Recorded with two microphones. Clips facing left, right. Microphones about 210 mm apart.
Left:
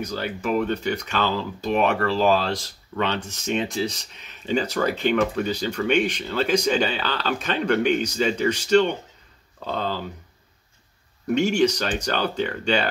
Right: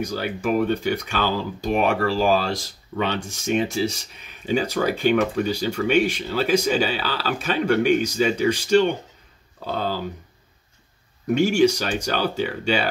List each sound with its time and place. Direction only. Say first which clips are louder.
0.0 s speech: right 2 dB; 10° right (ahead or behind)
11.3 s speech: right 2 dB; 10° right (ahead or behind)